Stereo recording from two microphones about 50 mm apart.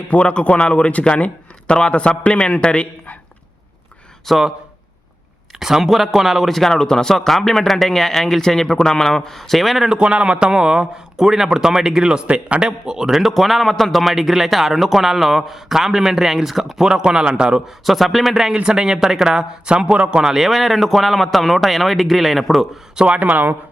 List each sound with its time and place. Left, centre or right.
0.1 s a man's voice: left
4.3 s a man's voice: centre
5.5 s speech: centre
9.9 s a man's voice: right
17.8 s speech: centre
18.5 s a man's voice: centre
20.3 s speech: centre
23.0 s speech: right